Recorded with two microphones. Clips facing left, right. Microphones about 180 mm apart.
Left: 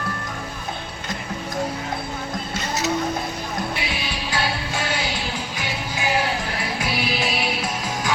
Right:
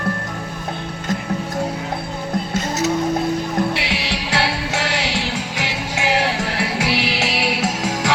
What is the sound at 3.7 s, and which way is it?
Music, 80° right.